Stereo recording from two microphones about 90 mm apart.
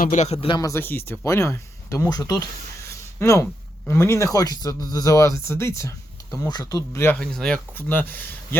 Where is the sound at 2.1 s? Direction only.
45° left (ahead or behind).